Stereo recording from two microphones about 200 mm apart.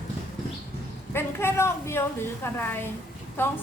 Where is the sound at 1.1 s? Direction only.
10° left (ahead or behind).